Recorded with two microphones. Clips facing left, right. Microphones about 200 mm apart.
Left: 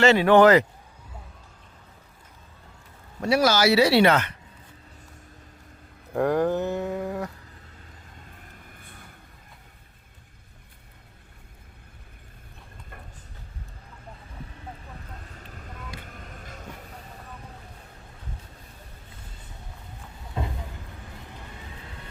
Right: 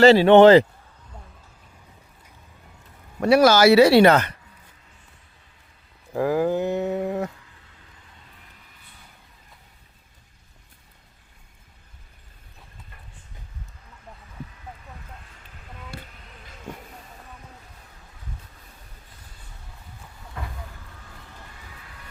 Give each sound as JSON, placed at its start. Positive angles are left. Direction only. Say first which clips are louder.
{"t": 0.0, "sound": "speech", "louder": "right 5 dB", "side_deg": -30}
{"t": 3.2, "sound": "speech", "louder": "right 6 dB", "side_deg": -60}
{"t": 6.1, "sound": "livestock", "louder": "right 1 dB", "side_deg": -5}
{"t": 8.3, "sound": "vehicle", "louder": "left 5 dB", "side_deg": 50}
{"t": 15.2, "sound": "a sound", "louder": "left 6 dB", "side_deg": 40}
{"t": 20.4, "sound": "a sound", "louder": "left 5 dB", "side_deg": 20}
{"t": 21.2, "sound": "vehicle", "louder": "left 3 dB", "side_deg": 20}